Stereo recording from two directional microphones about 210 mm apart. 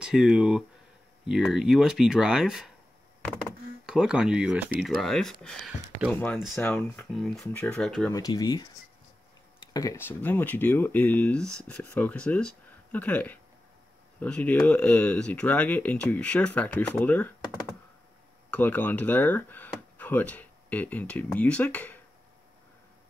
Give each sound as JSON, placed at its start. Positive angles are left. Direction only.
{"t": 0.0, "sound": "speech", "side_deg": -5}
{"t": 3.8, "sound": "speech", "side_deg": -5}
{"t": 8.1, "sound": "speech", "side_deg": 15}
{"t": 9.8, "sound": "speech", "side_deg": 15}
{"t": 18.5, "sound": "speech", "side_deg": 10}